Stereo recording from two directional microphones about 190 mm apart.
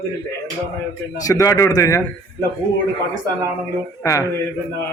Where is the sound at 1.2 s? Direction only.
20° left (ahead or behind).